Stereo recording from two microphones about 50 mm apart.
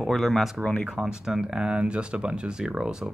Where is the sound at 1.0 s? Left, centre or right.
Centre.